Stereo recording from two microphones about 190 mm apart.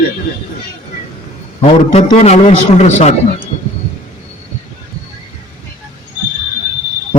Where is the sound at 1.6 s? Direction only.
35° left (ahead or behind).